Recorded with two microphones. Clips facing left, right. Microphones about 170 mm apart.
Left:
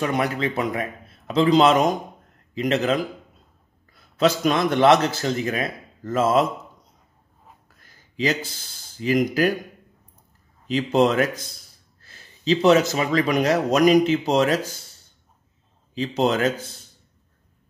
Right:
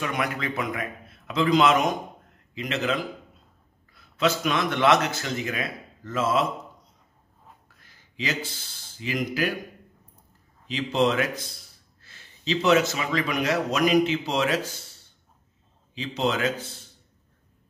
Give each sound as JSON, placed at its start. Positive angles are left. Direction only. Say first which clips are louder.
{"t": 0.0, "sound": "speech", "louder": "left 5 dB", "side_deg": 35}
{"t": 8.2, "sound": "speech", "louder": "left 6 dB", "side_deg": 40}
{"t": 10.7, "sound": "speech", "louder": "left 5 dB", "side_deg": 45}
{"t": 15.9, "sound": "speech", "louder": "left 5 dB", "side_deg": 40}